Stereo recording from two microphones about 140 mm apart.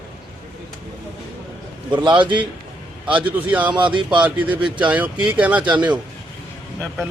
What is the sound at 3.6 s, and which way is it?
Speech, 35° right (ahead or behind).